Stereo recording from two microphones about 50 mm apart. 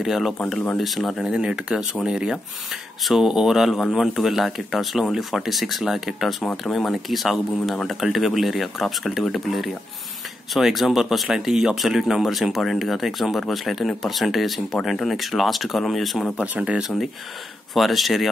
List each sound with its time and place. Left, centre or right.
0.0 s speech: centre
1.2 s speech: centre
2.7 s speech: centre
16.3 s speech: right
17.7 s speech: centre